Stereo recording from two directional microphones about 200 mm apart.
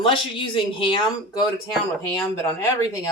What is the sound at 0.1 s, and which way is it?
Speech, 25° left (ahead or behind).